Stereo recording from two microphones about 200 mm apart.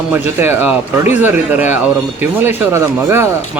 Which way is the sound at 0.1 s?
10° right (ahead or behind).